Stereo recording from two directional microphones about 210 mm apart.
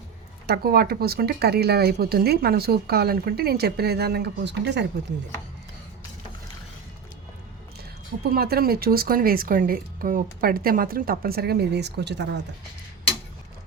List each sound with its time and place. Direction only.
0.4 s speech: 45° right (ahead or behind)
8.2 s speech: 45° right (ahead or behind)